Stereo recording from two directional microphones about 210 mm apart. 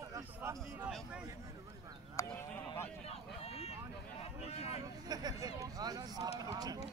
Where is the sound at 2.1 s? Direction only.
10° left (ahead or behind).